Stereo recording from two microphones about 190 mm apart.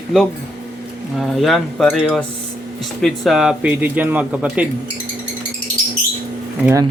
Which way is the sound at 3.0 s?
Centre (ahead or behind).